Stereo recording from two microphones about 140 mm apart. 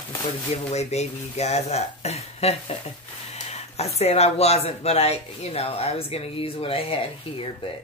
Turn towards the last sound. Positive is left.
turn(degrees=40)  # may be behind; listen again after turning